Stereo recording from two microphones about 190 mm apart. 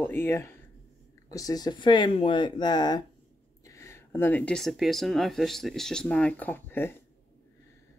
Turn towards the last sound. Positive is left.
turn(degrees=10)  # may be behind; listen again after turning